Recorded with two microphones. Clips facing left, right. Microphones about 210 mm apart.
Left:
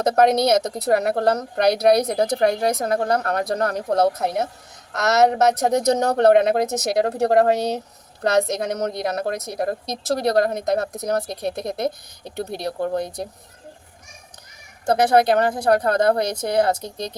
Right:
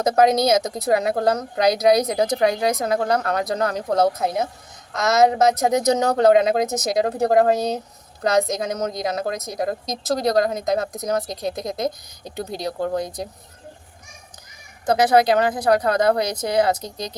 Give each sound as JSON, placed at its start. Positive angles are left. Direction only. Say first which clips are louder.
{"t": 0.2, "sound": "a woman's voice", "louder": "even", "side_deg": 65}
{"t": 15.1, "sound": "a woman's voice", "louder": "even", "side_deg": 55}